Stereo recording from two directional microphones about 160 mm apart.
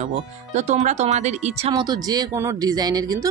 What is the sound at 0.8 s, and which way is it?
Speech, 45° right (ahead or behind).